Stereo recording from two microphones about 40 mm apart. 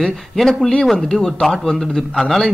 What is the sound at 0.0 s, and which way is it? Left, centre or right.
A man's voice, centre.